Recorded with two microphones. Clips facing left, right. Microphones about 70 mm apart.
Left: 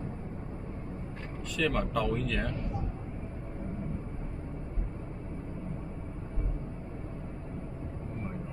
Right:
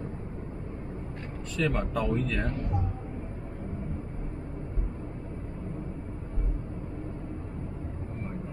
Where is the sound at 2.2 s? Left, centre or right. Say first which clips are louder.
Right 2 dB; right.